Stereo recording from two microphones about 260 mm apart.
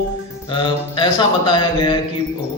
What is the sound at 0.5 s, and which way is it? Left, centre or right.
Speech, centre.